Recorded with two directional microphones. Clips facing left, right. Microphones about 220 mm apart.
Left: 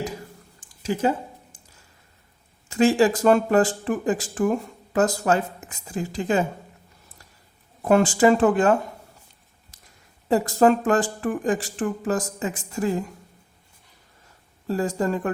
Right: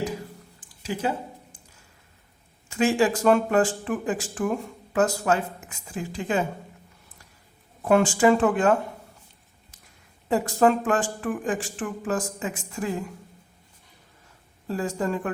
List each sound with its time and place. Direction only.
0.8 s speech: 45° left (ahead or behind)
2.6 s speech: 35° left (ahead or behind)
7.9 s speech: 40° left (ahead or behind)
10.2 s speech: 35° left (ahead or behind)
14.7 s speech: 40° left (ahead or behind)